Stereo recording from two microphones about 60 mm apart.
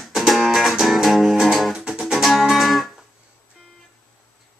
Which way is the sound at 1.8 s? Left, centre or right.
Centre.